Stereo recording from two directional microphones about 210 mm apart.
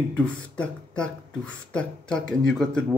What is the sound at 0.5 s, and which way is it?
Speech, 5° left (ahead or behind).